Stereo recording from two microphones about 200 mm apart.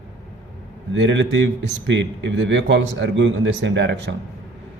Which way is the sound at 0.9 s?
65° right (ahead or behind).